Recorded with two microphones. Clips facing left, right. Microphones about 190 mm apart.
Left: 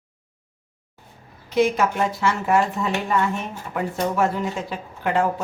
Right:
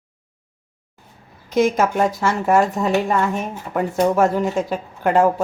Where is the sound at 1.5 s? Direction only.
45° right (ahead or behind).